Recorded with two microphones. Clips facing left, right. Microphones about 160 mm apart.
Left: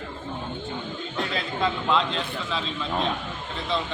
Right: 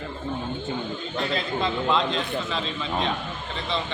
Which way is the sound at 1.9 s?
Centre (ahead or behind).